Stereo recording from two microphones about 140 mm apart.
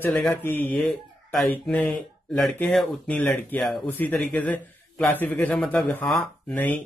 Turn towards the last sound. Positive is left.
turn(degrees=5)  # may be behind; listen again after turning